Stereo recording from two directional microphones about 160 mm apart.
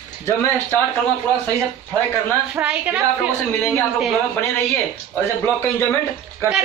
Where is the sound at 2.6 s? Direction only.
10° right (ahead or behind).